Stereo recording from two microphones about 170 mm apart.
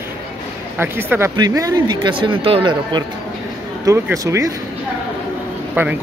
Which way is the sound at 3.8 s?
20° right (ahead or behind).